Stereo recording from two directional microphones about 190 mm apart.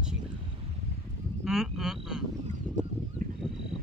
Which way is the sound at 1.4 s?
Centre (ahead or behind).